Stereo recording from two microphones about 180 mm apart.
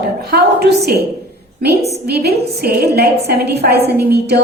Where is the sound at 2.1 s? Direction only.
60° right (ahead or behind).